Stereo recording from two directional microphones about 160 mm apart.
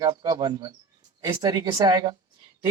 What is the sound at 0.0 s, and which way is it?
Speech, 25° right (ahead or behind).